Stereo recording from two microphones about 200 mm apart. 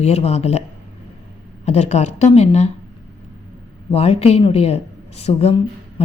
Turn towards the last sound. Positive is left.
turn(degrees=30)  # may be behind; listen again after turning